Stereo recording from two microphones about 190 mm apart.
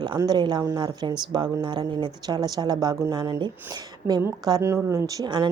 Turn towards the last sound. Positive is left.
turn(degrees=-20)  # may be behind; listen again after turning